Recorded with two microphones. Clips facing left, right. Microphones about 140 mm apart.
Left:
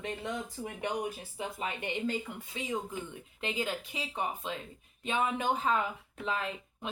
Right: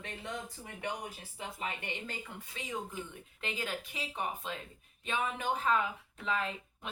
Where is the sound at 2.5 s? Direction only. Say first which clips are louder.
Left 4 dB; 20° left (ahead or behind).